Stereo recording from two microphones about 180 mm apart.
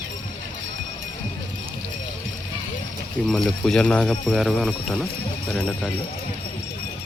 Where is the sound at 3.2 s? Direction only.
Centre (ahead or behind).